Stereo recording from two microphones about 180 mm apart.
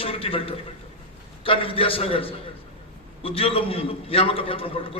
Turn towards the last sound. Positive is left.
turn(degrees=30)  # may be behind; listen again after turning